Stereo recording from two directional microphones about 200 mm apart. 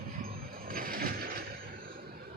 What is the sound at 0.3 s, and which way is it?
Vehicle, 45° right (ahead or behind).